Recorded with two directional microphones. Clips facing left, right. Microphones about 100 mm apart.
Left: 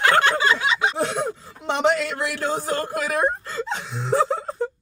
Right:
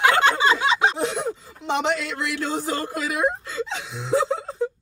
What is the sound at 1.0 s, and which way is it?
Speech, 50° left (ahead or behind).